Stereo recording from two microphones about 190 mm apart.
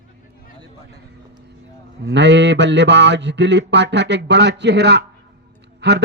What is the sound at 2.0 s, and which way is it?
Mantra, 65° right (ahead or behind).